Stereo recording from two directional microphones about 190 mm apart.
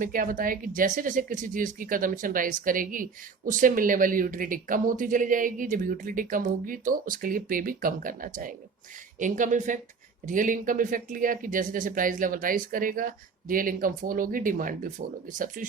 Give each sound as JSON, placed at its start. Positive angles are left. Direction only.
{"t": 0.0, "sound": "speech", "side_deg": -45}